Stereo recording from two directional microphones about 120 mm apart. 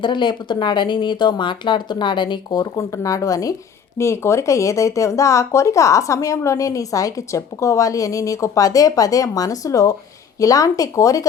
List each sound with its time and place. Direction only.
0.0 s speech: 40° left (ahead or behind)
2.7 s speech: 25° left (ahead or behind)